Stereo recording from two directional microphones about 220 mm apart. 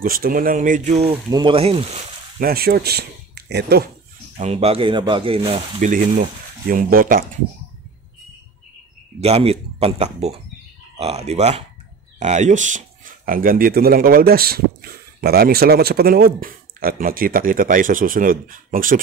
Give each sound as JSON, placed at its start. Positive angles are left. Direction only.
{"t": 0.0, "sound": "speech", "side_deg": -40}
{"t": 2.4, "sound": "speech", "side_deg": -45}
{"t": 4.4, "sound": "speech", "side_deg": -30}
{"t": 9.2, "sound": "speech", "side_deg": -25}